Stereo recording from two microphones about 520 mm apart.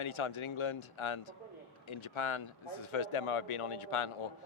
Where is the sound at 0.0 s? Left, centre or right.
Left.